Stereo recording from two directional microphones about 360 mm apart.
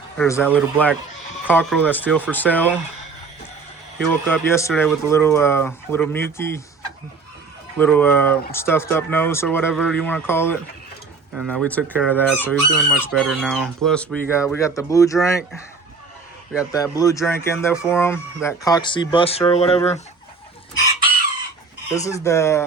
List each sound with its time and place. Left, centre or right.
0.2 s chicken: centre
4.1 s speech: centre
7.8 s chicken: centre
16.7 s speech: centre
21.9 s speech: centre